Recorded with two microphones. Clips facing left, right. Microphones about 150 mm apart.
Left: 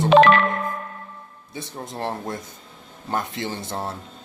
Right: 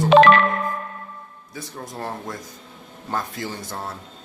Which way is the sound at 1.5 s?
25° left (ahead or behind).